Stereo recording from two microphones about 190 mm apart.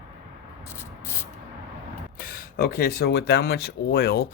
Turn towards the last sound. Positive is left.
turn(degrees=55)  # may be behind; listen again after turning